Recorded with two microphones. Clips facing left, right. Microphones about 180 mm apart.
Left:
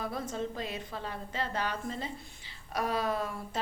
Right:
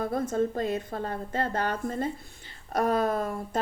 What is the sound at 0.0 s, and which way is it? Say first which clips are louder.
A woman's voice: right 8 dB; 50° right (ahead or behind).